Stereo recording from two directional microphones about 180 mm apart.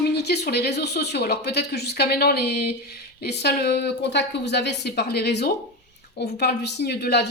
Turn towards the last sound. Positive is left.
turn(degrees=65)  # may be behind; listen again after turning